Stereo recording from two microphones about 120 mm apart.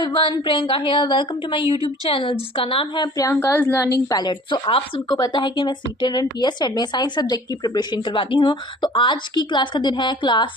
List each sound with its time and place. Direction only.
0.0 s a woman's voice: 45° left (ahead or behind)